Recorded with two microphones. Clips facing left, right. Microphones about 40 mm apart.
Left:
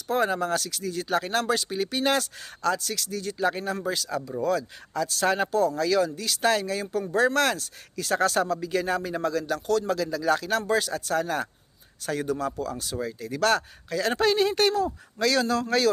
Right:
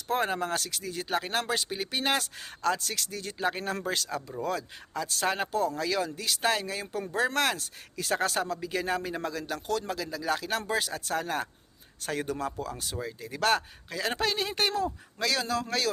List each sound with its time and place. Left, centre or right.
0.1 s speech: right
0.8 s speech: right
3.8 s speech: right
5.2 s speech: centre
12.0 s speech: right; by 14.2 s centre
14.2 s a man's voice: centre
14.5 s a man's voice: centre